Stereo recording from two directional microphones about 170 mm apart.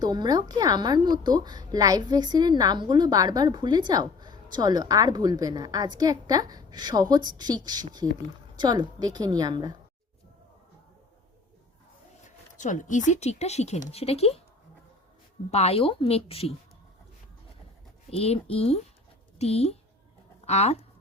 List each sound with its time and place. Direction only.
0.0 s a woman's voice: 25° right (ahead or behind)
12.2 s speech: 45° left (ahead or behind)
15.4 s a woman's voice: 40° left (ahead or behind)
18.1 s a woman's voice: 35° left (ahead or behind)